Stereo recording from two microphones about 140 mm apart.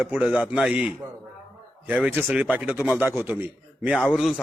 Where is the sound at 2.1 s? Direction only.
15° right (ahead or behind).